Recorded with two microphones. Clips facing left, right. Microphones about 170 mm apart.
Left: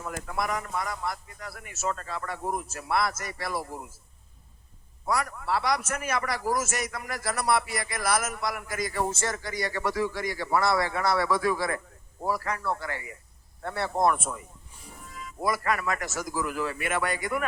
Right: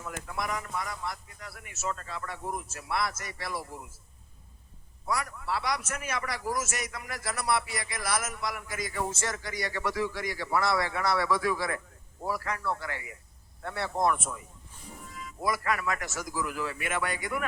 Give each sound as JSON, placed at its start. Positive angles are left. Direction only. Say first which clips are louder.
{"t": 0.0, "sound": "a man's voice", "louder": "left 4 dB", "side_deg": 50}
{"t": 5.1, "sound": "a man's voice", "louder": "left 4 dB", "side_deg": 50}
{"t": 8.2, "sound": "a man's voice", "louder": "left 3 dB", "side_deg": 65}
{"t": 8.6, "sound": "a man's voice", "louder": "left 5 dB", "side_deg": 45}